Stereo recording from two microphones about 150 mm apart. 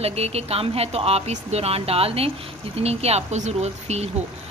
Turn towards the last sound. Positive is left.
turn(degrees=-45)  # may be behind; listen again after turning